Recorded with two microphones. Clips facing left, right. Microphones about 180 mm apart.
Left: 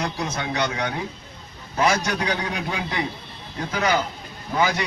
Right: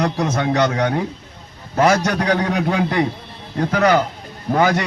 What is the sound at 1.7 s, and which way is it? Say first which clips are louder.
Speech: right 6 dB; 55° right (ahead or behind).